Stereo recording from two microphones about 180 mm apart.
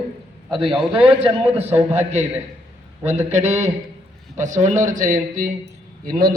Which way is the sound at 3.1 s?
35° right (ahead or behind).